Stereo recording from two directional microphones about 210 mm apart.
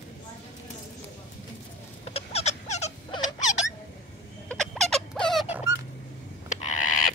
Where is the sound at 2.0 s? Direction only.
30° left (ahead or behind).